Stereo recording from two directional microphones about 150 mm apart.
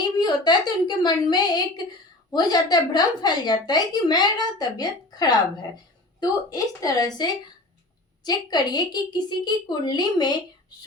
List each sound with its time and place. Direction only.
0.2 s a child's voice: 30° left (ahead or behind)